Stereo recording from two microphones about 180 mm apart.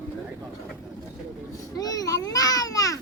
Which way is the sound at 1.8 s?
20° left (ahead or behind).